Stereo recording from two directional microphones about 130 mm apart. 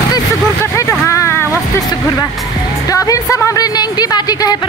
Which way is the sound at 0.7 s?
25° left (ahead or behind).